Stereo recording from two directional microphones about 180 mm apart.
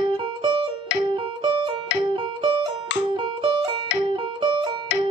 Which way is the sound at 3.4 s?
25° right (ahead or behind).